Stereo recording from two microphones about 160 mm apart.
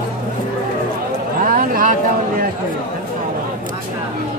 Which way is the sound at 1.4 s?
60° right (ahead or behind).